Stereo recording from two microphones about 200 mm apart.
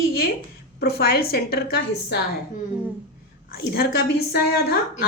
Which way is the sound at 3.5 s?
50° left (ahead or behind).